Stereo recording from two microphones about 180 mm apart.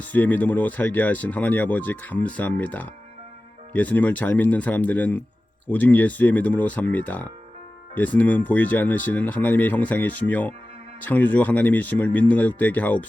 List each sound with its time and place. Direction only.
0.0 s speech: 10° left (ahead or behind)